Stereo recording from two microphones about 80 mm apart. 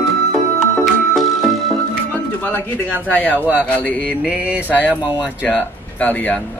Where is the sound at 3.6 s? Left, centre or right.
Centre.